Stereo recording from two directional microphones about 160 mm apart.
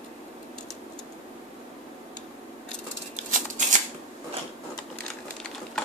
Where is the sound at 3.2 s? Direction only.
50° right (ahead or behind).